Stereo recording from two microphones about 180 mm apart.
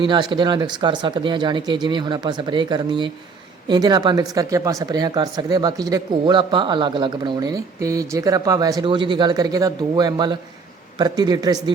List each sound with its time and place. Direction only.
0.0 s speech: 25° right (ahead or behind)